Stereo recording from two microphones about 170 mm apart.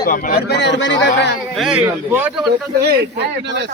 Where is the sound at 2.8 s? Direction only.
85° right.